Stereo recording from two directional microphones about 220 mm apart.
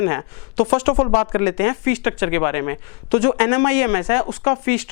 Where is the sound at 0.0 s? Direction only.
20° left (ahead or behind).